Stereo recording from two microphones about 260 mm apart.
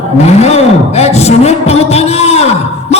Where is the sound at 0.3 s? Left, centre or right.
Left.